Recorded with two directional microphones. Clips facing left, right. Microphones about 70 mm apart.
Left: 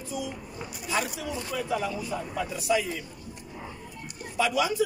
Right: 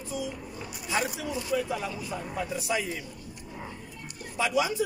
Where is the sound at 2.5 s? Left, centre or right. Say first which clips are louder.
Left 5 dB; right.